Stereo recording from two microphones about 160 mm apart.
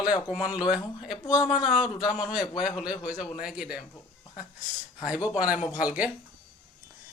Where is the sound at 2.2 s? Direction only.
5° right (ahead or behind).